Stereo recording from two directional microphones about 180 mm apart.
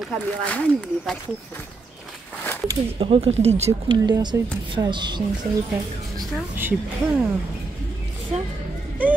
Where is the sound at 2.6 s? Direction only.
30° right (ahead or behind).